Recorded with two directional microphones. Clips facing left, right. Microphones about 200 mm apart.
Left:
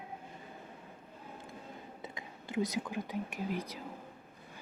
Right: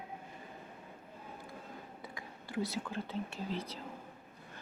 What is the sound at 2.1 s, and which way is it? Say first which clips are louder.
Speech: left 3 dB; 20° left (ahead or behind).